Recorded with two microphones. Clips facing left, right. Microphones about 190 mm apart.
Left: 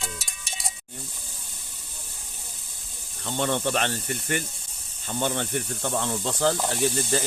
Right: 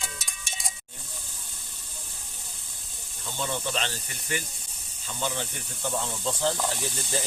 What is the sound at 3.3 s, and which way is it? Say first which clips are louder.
Speech: left 6 dB; 65° left (ahead or behind).